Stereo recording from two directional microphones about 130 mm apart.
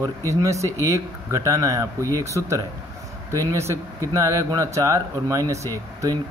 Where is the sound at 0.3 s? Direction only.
25° right (ahead or behind).